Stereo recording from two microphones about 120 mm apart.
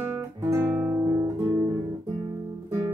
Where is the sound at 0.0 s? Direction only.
20° right (ahead or behind).